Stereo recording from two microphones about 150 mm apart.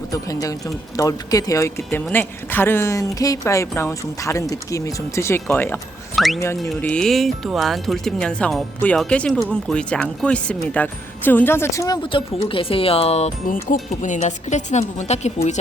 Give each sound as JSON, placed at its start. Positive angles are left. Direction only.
{"t": 0.1, "sound": "speech", "side_deg": 20}
{"t": 6.1, "sound": "speech", "side_deg": 0}
{"t": 12.0, "sound": "a woman's voice", "side_deg": 35}